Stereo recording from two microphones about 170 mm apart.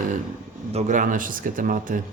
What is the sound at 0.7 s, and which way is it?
Speech, 50° right (ahead or behind).